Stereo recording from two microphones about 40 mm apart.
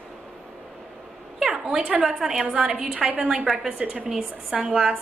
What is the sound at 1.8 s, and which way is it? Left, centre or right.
Speech, right.